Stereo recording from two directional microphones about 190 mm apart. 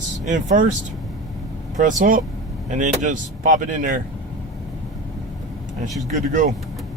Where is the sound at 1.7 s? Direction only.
45° right (ahead or behind).